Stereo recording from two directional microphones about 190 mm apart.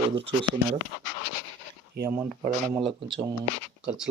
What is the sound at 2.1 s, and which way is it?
Speech, 10° right (ahead or behind).